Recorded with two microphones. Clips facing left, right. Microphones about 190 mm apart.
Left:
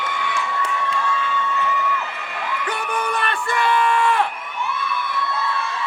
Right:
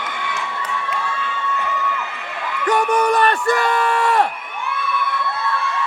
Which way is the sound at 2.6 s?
40° right (ahead or behind).